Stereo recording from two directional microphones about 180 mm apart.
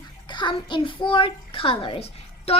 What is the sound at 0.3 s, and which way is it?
A child's voice, 25° left (ahead or behind).